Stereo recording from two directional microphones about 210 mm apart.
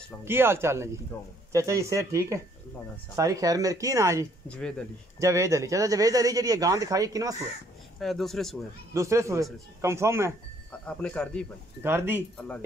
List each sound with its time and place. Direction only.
0.2 s speech: 10° right (ahead or behind)
4.5 s speech: 5° left (ahead or behind)
5.2 s speech: 15° right (ahead or behind)
8.0 s speech: centre (ahead or behind)
8.9 s speech: 15° right (ahead or behind)
10.9 s speech: 5° left (ahead or behind)
11.8 s speech: 10° right (ahead or behind)